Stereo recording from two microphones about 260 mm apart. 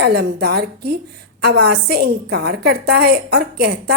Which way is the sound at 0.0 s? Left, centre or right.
Right.